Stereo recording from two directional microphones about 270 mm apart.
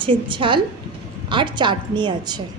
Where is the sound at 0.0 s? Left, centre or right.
Centre.